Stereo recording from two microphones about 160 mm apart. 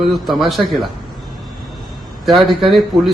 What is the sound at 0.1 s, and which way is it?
Speech, centre (ahead or behind).